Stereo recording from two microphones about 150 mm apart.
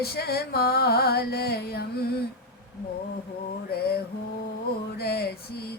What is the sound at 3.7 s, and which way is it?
Music, 90° left.